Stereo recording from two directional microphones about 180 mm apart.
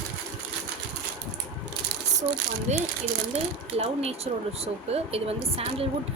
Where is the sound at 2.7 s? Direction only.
40° right (ahead or behind).